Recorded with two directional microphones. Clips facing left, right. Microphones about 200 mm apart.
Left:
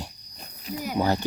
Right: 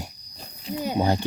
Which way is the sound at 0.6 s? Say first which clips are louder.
Right 2 dB; 25° right (ahead or behind).